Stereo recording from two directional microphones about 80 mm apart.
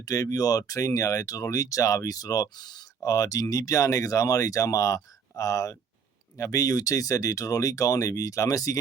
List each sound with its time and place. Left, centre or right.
0.0 s speech: left
3.0 s speech: left